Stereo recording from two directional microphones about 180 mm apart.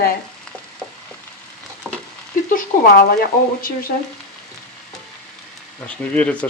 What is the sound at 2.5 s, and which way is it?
Speech, 50° left (ahead or behind).